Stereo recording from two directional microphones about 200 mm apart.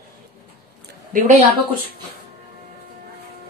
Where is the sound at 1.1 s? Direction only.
45° right (ahead or behind).